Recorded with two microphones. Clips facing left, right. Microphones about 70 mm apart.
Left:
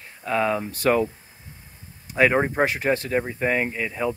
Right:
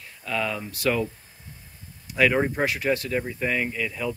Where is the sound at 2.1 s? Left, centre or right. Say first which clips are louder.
Left 2 dB; left.